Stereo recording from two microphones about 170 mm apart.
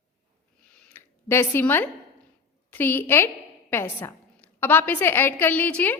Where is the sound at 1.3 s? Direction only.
15° left (ahead or behind).